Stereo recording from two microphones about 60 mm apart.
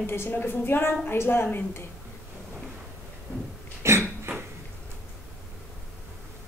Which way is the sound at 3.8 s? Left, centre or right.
Right.